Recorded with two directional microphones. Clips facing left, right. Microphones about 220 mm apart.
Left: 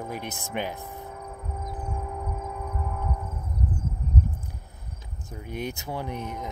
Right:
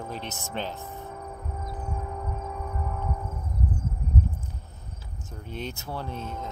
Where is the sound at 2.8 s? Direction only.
Centre (ahead or behind).